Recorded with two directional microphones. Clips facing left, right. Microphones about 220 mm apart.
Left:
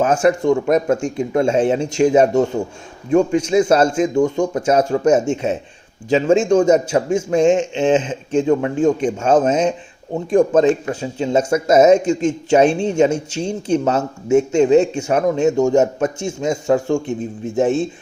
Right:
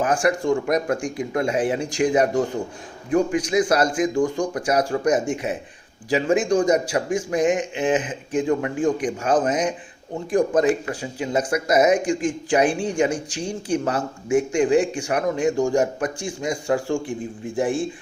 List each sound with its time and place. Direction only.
0.0 s speech: 25° left (ahead or behind)